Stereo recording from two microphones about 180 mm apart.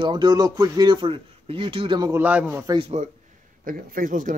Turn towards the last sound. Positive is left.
turn(degrees=-50)  # may be behind; listen again after turning